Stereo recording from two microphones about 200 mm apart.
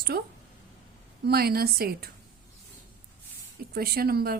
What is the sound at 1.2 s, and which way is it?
Speech, 50° right (ahead or behind).